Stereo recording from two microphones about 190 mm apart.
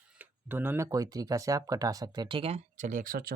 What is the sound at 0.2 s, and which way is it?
Speech, 10° right (ahead or behind).